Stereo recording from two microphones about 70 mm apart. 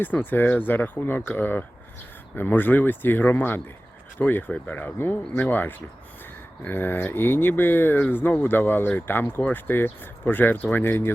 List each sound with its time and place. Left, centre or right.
0.0 s speech: left